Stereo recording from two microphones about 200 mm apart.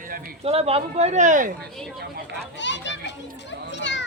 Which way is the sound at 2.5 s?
65° left (ahead or behind).